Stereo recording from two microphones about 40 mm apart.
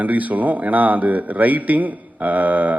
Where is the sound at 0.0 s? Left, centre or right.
Right.